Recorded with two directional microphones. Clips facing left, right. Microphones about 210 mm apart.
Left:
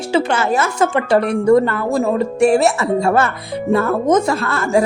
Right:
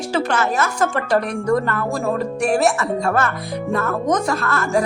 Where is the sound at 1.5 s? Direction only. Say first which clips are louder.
Left 6 dB; 25° left (ahead or behind).